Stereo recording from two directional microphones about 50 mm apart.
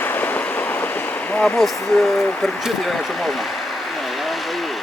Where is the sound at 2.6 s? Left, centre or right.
Centre.